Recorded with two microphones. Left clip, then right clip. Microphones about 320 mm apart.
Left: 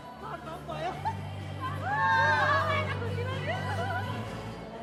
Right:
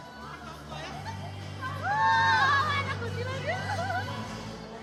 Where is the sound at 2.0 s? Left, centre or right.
Right.